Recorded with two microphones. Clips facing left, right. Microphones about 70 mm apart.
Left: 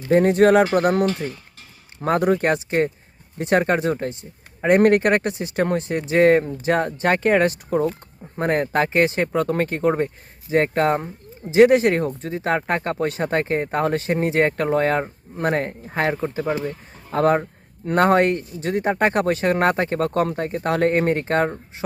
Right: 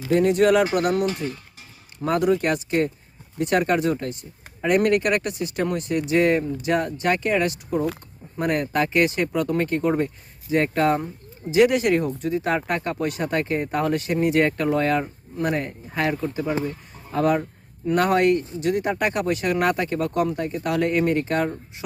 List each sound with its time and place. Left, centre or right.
0.1 s speech: left